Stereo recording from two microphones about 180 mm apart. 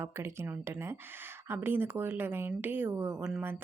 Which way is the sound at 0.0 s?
15° right (ahead or behind).